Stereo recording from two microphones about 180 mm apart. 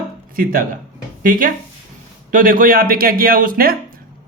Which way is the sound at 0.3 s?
50° right (ahead or behind).